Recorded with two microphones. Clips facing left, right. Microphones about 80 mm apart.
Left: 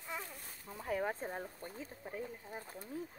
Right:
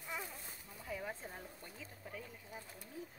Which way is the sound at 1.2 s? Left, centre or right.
Left.